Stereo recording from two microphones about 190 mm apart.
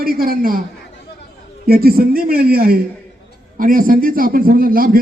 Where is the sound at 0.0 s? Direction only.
50° right (ahead or behind).